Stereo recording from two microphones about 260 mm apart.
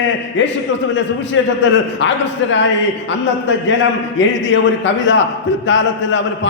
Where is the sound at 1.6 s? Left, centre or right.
Left.